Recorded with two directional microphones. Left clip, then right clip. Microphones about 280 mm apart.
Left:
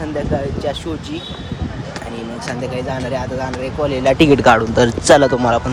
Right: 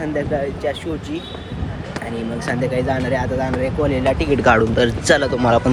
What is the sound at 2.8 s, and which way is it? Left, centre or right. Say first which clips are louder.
Speech: right 2 dB; centre.